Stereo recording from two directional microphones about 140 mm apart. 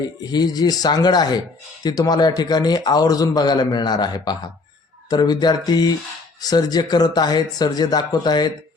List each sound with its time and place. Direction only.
0.2 s a man's voice: 30° left (ahead or behind)